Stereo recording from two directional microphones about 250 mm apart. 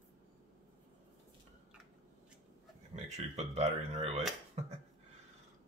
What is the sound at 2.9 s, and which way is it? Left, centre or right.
Speech, right.